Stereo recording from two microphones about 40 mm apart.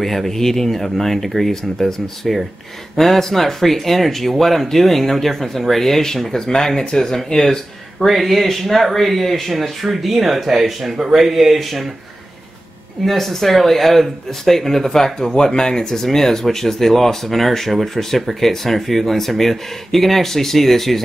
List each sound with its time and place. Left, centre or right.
0.0 s speech: centre
11.0 s speech: centre
11.2 s speech: centre
13.0 s speech: centre